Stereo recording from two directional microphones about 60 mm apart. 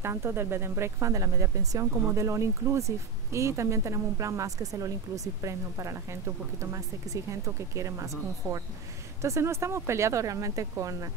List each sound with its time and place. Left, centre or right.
0.0 s speech: right